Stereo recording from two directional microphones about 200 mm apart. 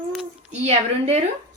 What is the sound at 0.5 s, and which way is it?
Speech, 30° right (ahead or behind).